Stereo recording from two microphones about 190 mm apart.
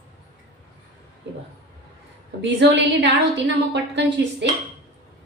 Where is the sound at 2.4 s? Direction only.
65° right (ahead or behind).